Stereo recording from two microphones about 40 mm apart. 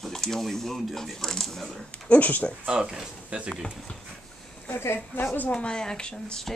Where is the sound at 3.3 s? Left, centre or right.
Right.